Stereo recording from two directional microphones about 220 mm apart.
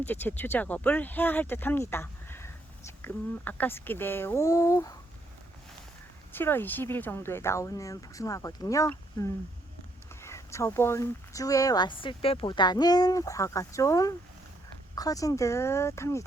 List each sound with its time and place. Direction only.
0.0 s speech: 10° left (ahead or behind)
6.3 s speech: 10° left (ahead or behind)